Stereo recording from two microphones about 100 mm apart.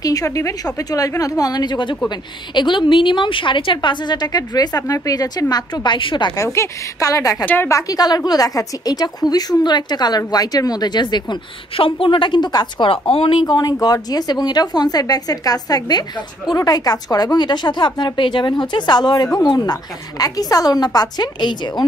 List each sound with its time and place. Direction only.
0.0 s a woman's voice: 35° left (ahead or behind); by 6.3 s 55° left (ahead or behind)
6.3 s a woman's voice: 30° left (ahead or behind)
7.4 s a woman's voice: 20° left (ahead or behind)
7.7 s a woman's voice: 40° left (ahead or behind); by 13.6 s 55° left (ahead or behind)
13.6 s a woman's voice: 40° left (ahead or behind)